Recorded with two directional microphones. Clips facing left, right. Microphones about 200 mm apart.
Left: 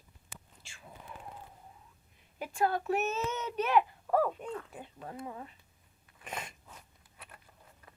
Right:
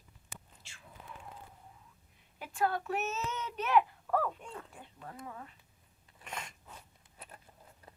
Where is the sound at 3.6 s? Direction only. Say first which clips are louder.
Left 1 dB; centre (ahead or behind).